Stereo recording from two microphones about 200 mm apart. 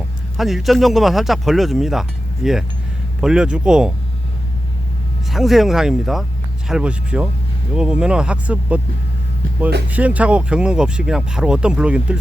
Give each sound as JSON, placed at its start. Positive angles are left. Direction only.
{"t": 0.3, "sound": "speech", "side_deg": 0}
{"t": 5.3, "sound": "speech", "side_deg": 0}
{"t": 9.9, "sound": "speech", "side_deg": -5}